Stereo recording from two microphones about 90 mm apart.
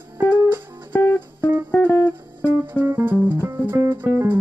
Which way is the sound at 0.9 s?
15° left (ahead or behind).